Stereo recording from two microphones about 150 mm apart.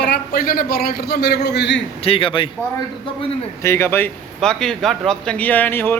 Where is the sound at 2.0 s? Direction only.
35° left (ahead or behind).